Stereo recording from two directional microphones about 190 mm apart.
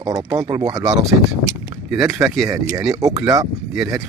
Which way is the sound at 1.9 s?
15° right (ahead or behind).